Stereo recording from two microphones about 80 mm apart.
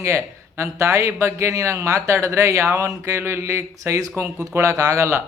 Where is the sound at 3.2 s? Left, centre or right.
Right.